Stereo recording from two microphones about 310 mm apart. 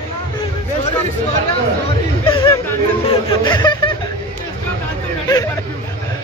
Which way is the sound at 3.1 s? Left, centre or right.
Centre.